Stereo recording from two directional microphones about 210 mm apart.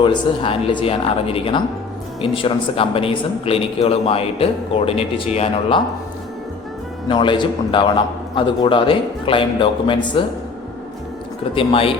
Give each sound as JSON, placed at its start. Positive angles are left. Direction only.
{"t": 0.0, "sound": "a man's voice", "side_deg": 25}
{"t": 7.1, "sound": "a man's voice", "side_deg": 20}
{"t": 11.5, "sound": "a man's voice", "side_deg": 25}